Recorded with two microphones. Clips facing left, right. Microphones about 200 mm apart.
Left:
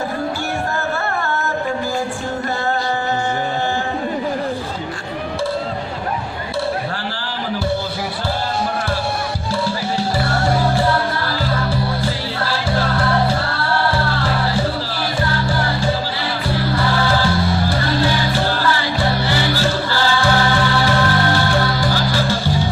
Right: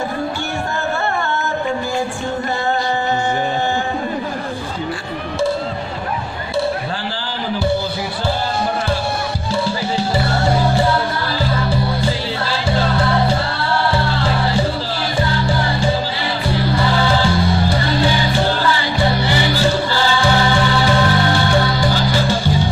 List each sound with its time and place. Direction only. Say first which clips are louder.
9.9 s music: right 2 dB; 20° right (ahead or behind)